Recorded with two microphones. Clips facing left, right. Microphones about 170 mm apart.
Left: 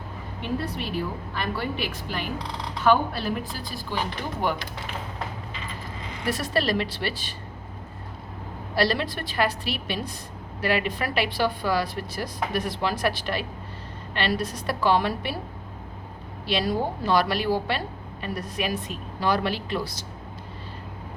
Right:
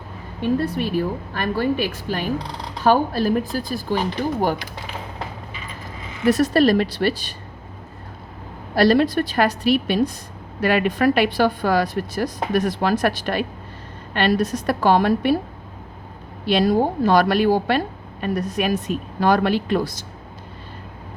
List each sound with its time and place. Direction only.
0.8 s a woman's voice: 45° right (ahead or behind)
6.2 s a woman's voice: 45° right (ahead or behind)
8.7 s a woman's voice: 45° right (ahead or behind)
16.5 s a woman's voice: 45° right (ahead or behind)